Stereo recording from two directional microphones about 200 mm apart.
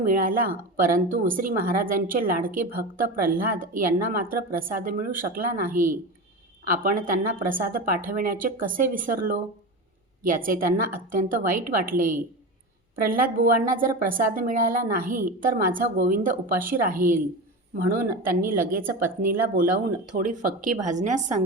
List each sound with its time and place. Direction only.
0.0 s a woman's voice: 45° right (ahead or behind)